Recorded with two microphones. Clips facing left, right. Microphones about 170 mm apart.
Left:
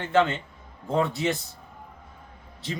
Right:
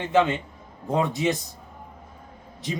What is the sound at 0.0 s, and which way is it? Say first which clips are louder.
Speech: right 1 dB; 15° right (ahead or behind).